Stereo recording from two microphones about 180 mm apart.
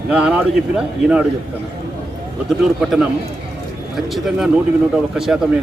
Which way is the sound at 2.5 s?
5° right (ahead or behind).